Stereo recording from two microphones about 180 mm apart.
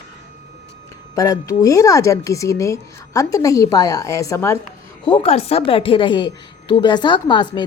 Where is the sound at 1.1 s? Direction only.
20° left (ahead or behind).